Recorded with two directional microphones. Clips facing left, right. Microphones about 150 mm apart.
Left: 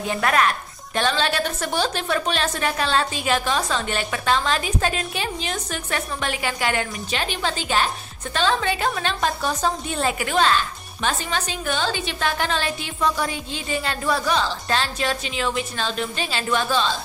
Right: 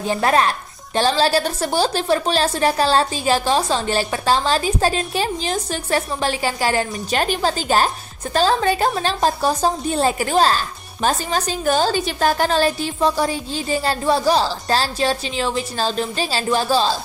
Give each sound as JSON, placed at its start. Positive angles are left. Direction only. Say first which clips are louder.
{"t": 0.0, "sound": "a woman's voice", "louder": "right 3 dB", "side_deg": -30}